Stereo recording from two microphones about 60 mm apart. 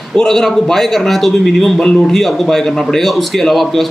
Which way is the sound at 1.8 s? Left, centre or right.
Centre.